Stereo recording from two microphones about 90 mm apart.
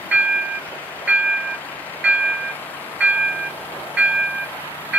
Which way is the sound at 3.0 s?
15° right (ahead or behind).